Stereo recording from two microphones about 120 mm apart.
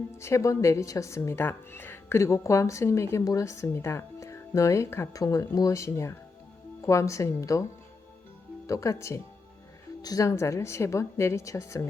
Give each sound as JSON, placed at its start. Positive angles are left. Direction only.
{"t": 0.1, "sound": "a woman's voice", "side_deg": 25}
{"t": 8.6, "sound": "a woman's voice", "side_deg": 25}